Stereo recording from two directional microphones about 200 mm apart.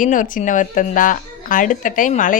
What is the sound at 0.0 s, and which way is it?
Speech, 40° left (ahead or behind).